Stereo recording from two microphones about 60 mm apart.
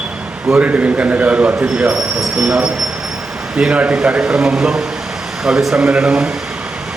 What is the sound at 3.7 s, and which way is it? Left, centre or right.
Speech, centre.